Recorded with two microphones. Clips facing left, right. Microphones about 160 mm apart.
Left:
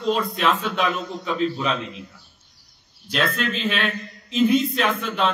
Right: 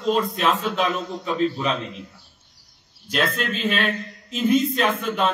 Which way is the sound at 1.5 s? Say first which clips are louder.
Even; centre (ahead or behind).